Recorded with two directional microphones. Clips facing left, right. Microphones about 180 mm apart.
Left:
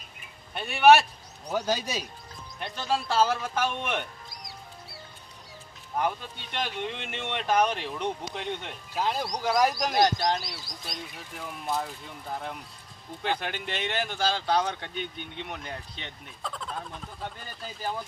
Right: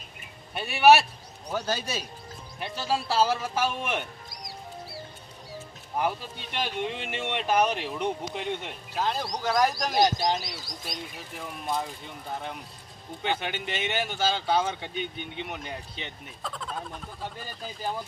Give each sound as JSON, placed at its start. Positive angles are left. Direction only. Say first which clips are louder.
{"t": 0.6, "sound": "speech", "louder": "even", "side_deg": -5}
{"t": 1.5, "sound": "speech", "louder": "left 2 dB", "side_deg": 10}
{"t": 2.6, "sound": "speech", "louder": "even", "side_deg": -5}
{"t": 4.4, "sound": "music", "louder": "right 8 dB", "side_deg": -30}
{"t": 5.9, "sound": "speech", "louder": "right 1 dB", "side_deg": -5}
{"t": 8.9, "sound": "speech", "louder": "even", "side_deg": 10}